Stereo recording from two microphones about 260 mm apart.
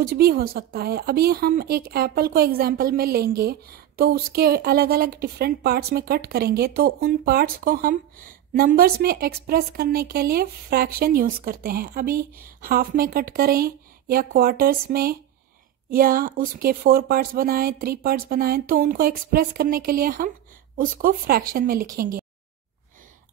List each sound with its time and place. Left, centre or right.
0.0 s speech: right